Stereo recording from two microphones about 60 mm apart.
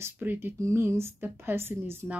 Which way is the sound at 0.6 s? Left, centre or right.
Right.